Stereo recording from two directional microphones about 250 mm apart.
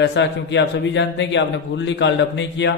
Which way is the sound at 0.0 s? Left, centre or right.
Left.